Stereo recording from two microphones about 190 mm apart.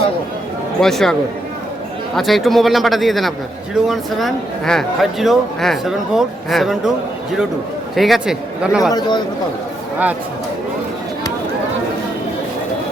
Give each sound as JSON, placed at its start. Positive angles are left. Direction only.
{"t": 0.8, "sound": "speech", "side_deg": 0}
{"t": 2.1, "sound": "speech", "side_deg": 0}
{"t": 7.9, "sound": "speech", "side_deg": 0}
{"t": 8.9, "sound": "a man's voice", "side_deg": 20}